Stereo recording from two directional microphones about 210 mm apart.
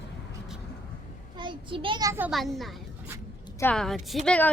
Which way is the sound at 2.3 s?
Centre (ahead or behind).